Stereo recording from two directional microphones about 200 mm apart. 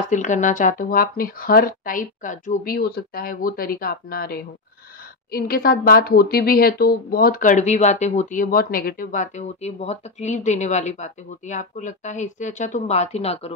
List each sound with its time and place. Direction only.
0.1 s speech: 40° left (ahead or behind)